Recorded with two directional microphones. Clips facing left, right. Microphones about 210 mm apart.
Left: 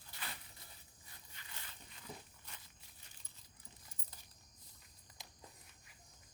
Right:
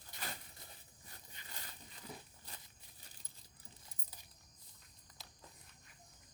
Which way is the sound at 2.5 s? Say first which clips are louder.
Right 3 dB; 35° right (ahead or behind).